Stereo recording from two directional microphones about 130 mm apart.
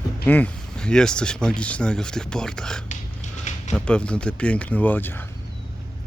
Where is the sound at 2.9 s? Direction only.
65° left (ahead or behind).